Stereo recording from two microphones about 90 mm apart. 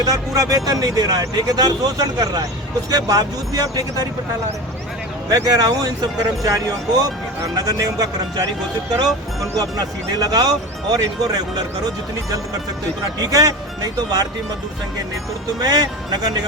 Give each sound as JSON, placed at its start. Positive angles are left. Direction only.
{"t": 0.0, "sound": "speech", "side_deg": -45}
{"t": 5.3, "sound": "speech", "side_deg": -45}
{"t": 9.6, "sound": "speech", "side_deg": -45}
{"t": 13.1, "sound": "speech", "side_deg": -45}
{"t": 15.6, "sound": "speech", "side_deg": -50}